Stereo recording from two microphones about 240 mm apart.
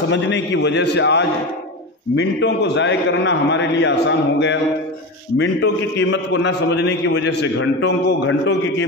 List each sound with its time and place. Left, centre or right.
0.1 s a man's voice: left